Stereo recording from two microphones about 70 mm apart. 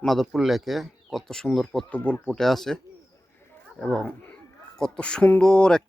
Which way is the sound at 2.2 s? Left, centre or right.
Centre.